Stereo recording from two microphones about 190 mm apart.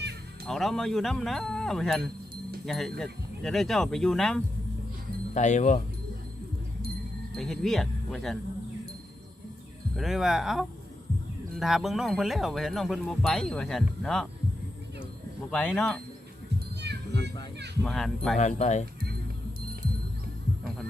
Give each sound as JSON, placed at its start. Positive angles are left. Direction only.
{"t": 0.4, "sound": "speech", "side_deg": 0}
{"t": 5.3, "sound": "speech", "side_deg": 40}
{"t": 7.3, "sound": "speech", "side_deg": 0}
{"t": 9.9, "sound": "speech", "side_deg": 0}
{"t": 15.4, "sound": "speech", "side_deg": 5}
{"t": 16.8, "sound": "a sound", "side_deg": -60}
{"t": 17.8, "sound": "speech", "side_deg": 5}
{"t": 18.3, "sound": "speech", "side_deg": 40}